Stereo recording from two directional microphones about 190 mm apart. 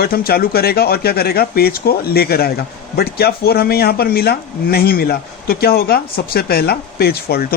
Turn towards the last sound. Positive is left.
turn(degrees=55)  # may be behind; listen again after turning